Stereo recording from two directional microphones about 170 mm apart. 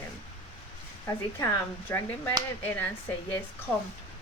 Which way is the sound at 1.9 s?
10° left (ahead or behind).